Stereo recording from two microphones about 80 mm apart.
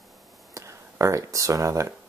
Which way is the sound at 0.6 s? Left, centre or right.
Right.